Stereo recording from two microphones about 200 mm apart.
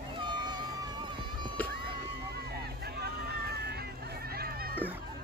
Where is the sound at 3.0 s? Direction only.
55° right (ahead or behind).